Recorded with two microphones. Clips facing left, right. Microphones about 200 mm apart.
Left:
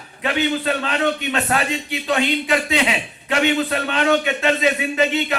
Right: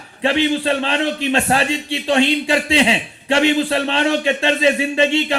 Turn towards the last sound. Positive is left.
turn(degrees=-30)  # may be behind; listen again after turning